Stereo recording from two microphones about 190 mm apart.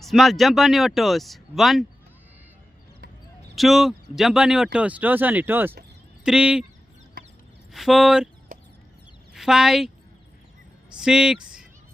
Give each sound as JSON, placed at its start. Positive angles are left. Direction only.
{"t": 0.0, "sound": "speech", "side_deg": 0}
{"t": 3.5, "sound": "speech", "side_deg": 0}
{"t": 7.2, "sound": "a sound", "side_deg": -60}
{"t": 7.7, "sound": "speech", "side_deg": 0}
{"t": 8.5, "sound": "a sound", "side_deg": -45}
{"t": 9.3, "sound": "speech", "side_deg": 0}
{"t": 10.9, "sound": "speech", "side_deg": -5}